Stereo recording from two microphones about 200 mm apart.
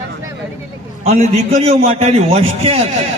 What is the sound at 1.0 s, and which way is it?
A man's voice, 35° right (ahead or behind).